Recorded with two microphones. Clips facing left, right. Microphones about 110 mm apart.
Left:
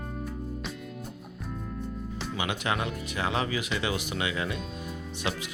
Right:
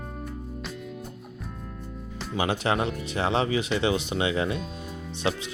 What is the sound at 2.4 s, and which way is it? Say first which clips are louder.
Speech: right 6 dB; 35° right (ahead or behind).